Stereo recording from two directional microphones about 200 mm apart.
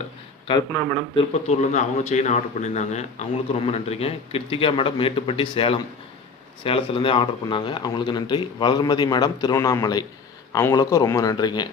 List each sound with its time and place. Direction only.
0.4 s speech: 20° left (ahead or behind)
1.1 s a man's voice: 35° left (ahead or behind)